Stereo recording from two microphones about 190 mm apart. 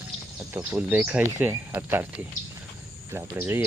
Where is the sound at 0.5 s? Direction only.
10° right (ahead or behind).